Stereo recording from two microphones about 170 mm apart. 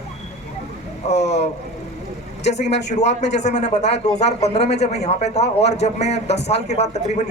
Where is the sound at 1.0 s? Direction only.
40° left (ahead or behind).